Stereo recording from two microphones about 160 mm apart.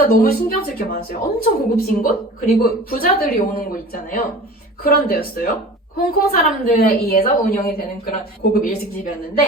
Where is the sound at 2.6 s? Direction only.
65° left (ahead or behind).